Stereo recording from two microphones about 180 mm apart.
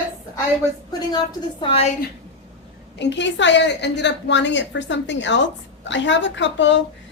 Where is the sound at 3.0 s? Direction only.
85° left.